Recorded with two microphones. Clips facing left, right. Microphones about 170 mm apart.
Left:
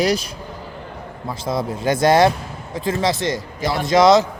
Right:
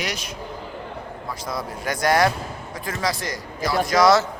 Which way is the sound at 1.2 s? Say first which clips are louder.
Left 8 dB; 25° left (ahead or behind).